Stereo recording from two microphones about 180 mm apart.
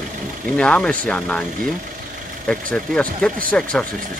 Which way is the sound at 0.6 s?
5° left (ahead or behind).